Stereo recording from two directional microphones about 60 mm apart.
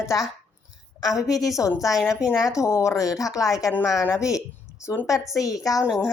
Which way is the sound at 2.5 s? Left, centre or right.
Left.